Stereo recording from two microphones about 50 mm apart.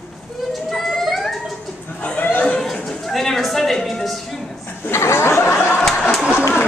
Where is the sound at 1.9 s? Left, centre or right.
Left.